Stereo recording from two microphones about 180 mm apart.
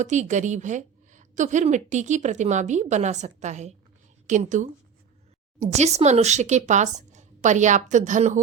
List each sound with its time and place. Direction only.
0.0 s a woman's voice: 40° right (ahead or behind)